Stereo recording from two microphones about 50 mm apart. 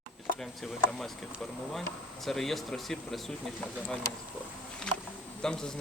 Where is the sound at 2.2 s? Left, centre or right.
Centre.